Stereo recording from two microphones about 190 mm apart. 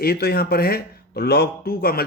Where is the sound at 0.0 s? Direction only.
55° left (ahead or behind).